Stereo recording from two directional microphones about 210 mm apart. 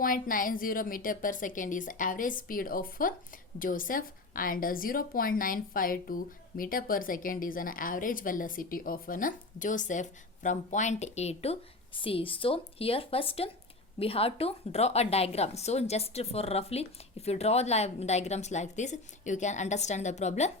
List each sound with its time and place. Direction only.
0.0 s a woman's voice: 40° left (ahead or behind)